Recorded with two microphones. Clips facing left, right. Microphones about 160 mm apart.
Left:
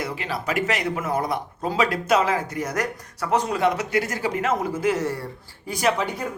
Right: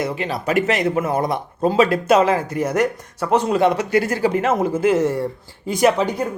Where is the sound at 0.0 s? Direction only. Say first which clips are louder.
Right 5 dB; 25° right (ahead or behind).